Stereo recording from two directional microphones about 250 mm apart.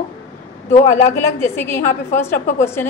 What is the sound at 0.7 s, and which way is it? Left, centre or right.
Speech, left.